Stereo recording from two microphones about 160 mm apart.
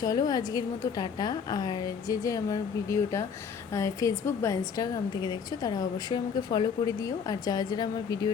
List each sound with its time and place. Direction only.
0.0 s a woman's voice: 20° left (ahead or behind)